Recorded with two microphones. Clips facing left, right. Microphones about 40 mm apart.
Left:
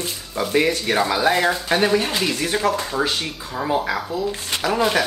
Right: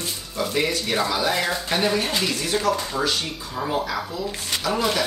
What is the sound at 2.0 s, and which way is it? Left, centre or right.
Speech, centre.